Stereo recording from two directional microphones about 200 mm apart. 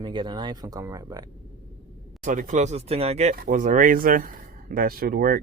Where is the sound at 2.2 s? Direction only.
40° right (ahead or behind).